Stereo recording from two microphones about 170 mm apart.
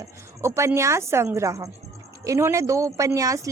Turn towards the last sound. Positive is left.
turn(degrees=-20)  # may be behind; listen again after turning